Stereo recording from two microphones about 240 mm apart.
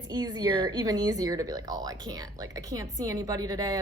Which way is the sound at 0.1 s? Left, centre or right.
Centre.